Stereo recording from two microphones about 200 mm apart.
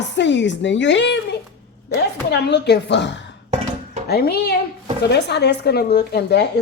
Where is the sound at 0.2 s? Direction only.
60° left (ahead or behind).